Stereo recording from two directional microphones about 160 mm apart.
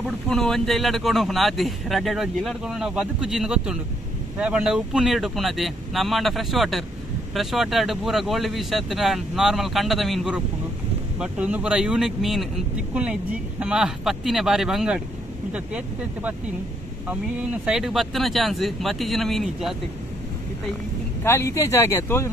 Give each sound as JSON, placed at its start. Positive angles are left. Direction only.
{"t": 0.0, "sound": "a man's voice", "side_deg": 5}
{"t": 17.6, "sound": "a man's voice", "side_deg": 0}
{"t": 21.2, "sound": "speech", "side_deg": 15}